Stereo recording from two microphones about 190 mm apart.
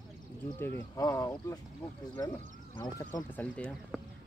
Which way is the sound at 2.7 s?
15° left (ahead or behind).